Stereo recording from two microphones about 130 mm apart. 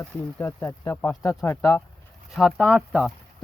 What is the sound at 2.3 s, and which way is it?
Speech, centre (ahead or behind).